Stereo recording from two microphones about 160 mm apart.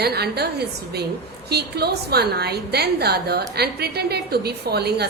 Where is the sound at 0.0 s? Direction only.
85° right.